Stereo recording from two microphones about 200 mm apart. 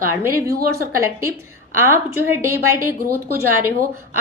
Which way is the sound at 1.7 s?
10° right (ahead or behind).